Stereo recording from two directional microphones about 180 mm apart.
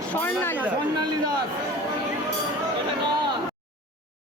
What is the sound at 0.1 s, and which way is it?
Speech, 10° left (ahead or behind).